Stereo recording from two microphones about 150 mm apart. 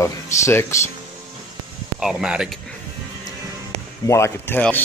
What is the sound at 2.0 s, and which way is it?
Speech, 5° right (ahead or behind).